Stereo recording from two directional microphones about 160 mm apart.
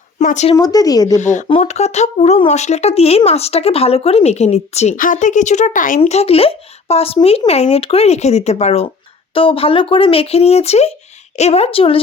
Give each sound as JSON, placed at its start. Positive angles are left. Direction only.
{"t": 0.2, "sound": "speech", "side_deg": 50}
{"t": 0.5, "sound": "speech", "side_deg": 25}
{"t": 1.2, "sound": "speech", "side_deg": 50}
{"t": 1.5, "sound": "speech", "side_deg": 40}
{"t": 6.0, "sound": "speech", "side_deg": 40}